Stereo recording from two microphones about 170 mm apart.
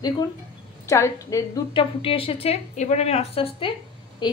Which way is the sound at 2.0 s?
30° left (ahead or behind).